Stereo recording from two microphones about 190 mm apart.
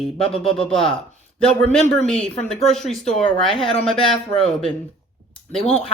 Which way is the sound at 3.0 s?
30° left (ahead or behind).